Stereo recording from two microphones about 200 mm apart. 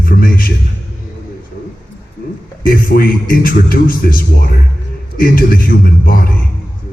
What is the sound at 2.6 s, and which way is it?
Music, 45° left (ahead or behind).